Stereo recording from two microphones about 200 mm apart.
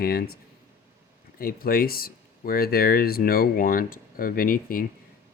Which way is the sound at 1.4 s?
50° left (ahead or behind).